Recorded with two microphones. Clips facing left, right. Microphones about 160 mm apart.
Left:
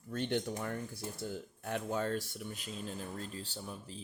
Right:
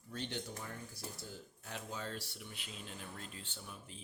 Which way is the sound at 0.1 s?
55° left (ahead or behind).